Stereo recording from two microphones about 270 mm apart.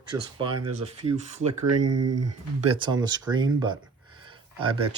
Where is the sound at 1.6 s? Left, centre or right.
Right.